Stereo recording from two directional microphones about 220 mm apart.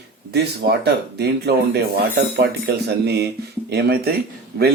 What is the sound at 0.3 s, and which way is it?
Speech, 50° right (ahead or behind).